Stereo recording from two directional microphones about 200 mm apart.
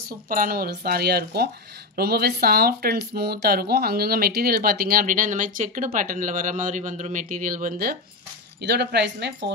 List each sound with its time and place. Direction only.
0.3 s speech: 45° right (ahead or behind)